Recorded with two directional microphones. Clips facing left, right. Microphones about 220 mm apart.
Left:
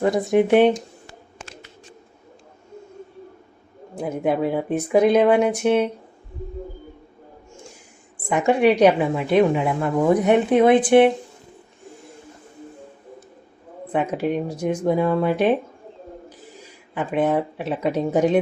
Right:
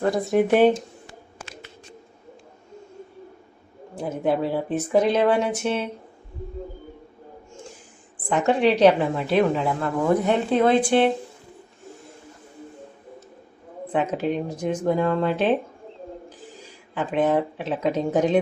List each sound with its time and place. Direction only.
0.0 s speech: 15° left (ahead or behind)
3.9 s speech: 10° left (ahead or behind)
8.3 s speech: 10° left (ahead or behind)
13.8 s speech: 10° left (ahead or behind)
16.9 s speech: 10° left (ahead or behind)